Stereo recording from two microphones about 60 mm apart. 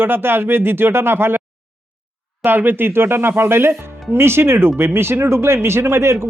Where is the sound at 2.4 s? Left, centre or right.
Right.